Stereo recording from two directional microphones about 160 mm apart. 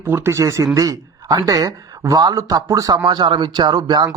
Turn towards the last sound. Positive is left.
turn(degrees=-25)  # may be behind; listen again after turning